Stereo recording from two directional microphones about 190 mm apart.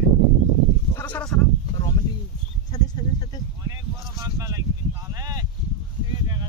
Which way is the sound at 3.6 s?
15° right (ahead or behind).